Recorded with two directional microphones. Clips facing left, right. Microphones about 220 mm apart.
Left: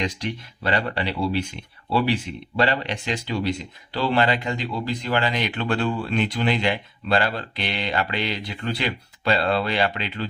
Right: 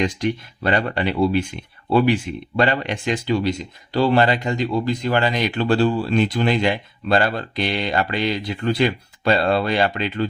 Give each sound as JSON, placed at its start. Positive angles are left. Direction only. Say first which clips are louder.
{"t": 0.0, "sound": "speech", "louder": "right 6 dB", "side_deg": -50}